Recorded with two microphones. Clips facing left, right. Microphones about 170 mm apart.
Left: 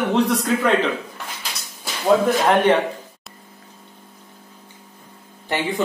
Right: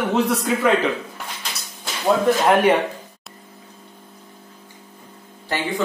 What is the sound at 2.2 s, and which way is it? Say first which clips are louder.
Speech: right 1 dB; 5° right (ahead or behind).